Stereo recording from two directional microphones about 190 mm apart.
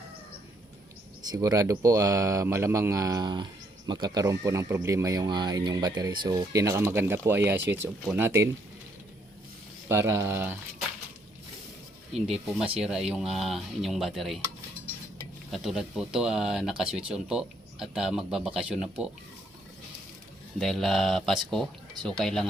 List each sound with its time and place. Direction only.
1.2 s speech: 20° right (ahead or behind)
9.9 s speech: 15° right (ahead or behind)
12.8 s speech: 5° right (ahead or behind)
15.5 s speech: centre (ahead or behind)
20.6 s speech: centre (ahead or behind)